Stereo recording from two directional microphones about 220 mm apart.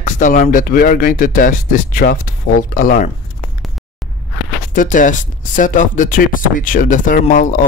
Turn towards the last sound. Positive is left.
turn(degrees=40)  # may be behind; listen again after turning